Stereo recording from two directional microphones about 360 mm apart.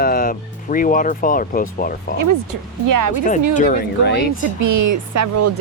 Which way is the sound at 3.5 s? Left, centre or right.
Left.